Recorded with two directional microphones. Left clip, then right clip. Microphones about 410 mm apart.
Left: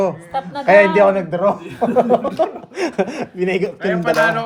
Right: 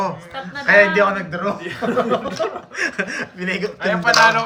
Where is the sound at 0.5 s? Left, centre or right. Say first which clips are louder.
Left 2 dB; centre.